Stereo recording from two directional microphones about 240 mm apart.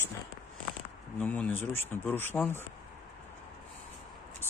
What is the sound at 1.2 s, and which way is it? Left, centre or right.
Speech, centre.